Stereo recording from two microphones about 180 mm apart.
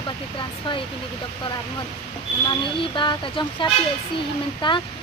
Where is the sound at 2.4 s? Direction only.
25° left (ahead or behind).